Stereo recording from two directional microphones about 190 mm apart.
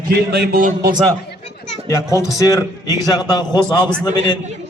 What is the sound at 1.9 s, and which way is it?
Speech, 15° left (ahead or behind).